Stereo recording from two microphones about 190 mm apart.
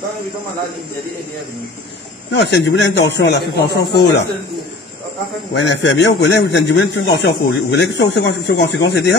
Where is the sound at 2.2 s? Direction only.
65° left (ahead or behind).